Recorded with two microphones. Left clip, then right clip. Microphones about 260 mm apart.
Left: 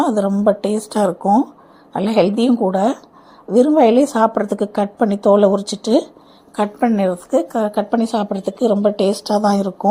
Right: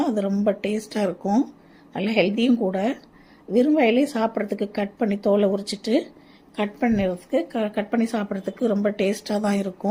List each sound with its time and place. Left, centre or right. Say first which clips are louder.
0.0 s a woman's voice: left 7 dB; centre
9.2 s speech: left 9 dB; centre
9.6 s a woman's voice: left 9 dB; centre